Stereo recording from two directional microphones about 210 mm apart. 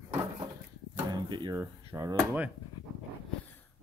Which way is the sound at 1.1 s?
20° right (ahead or behind).